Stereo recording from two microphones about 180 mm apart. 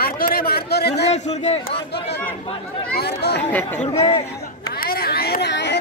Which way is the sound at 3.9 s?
20° left (ahead or behind).